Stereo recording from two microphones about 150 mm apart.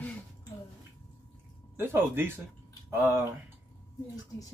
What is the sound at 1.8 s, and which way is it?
Speech, 15° right (ahead or behind).